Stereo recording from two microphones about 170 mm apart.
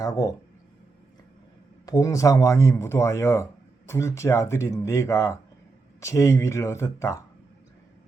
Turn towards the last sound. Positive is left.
turn(degrees=15)  # may be behind; listen again after turning